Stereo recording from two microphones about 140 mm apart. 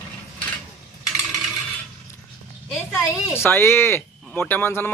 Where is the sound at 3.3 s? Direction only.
15° left (ahead or behind).